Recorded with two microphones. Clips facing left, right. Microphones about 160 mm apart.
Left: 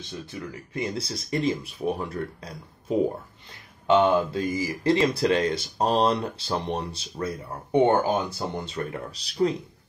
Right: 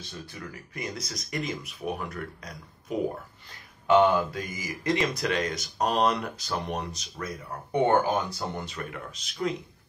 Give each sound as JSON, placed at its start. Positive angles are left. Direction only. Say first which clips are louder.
{"t": 0.3, "sound": "speech", "louder": "left 5 dB", "side_deg": 25}
{"t": 8.7, "sound": "speech", "louder": "left 6 dB", "side_deg": 35}